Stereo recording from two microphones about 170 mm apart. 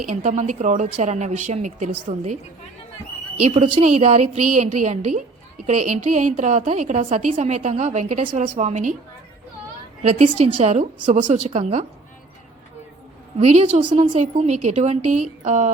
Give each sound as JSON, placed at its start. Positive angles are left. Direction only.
{"t": 0.0, "sound": "a woman's voice", "side_deg": -45}
{"t": 3.4, "sound": "a woman's voice", "side_deg": -35}
{"t": 10.0, "sound": "a woman's voice", "side_deg": -40}
{"t": 13.4, "sound": "a woman's voice", "side_deg": -40}